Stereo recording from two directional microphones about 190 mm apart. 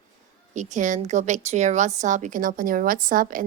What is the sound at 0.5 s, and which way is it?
A woman's voice, 40° right (ahead or behind).